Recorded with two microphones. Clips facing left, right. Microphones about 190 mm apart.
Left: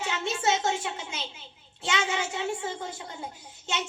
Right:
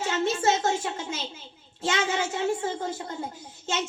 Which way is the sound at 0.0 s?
40° right (ahead or behind).